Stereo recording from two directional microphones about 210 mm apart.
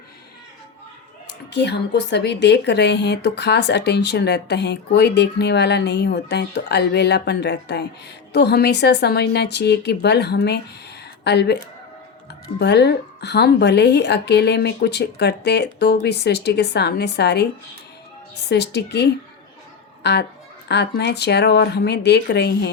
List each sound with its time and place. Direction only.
1.5 s a woman's voice: 55° left (ahead or behind)
12.5 s a woman's voice: 55° left (ahead or behind)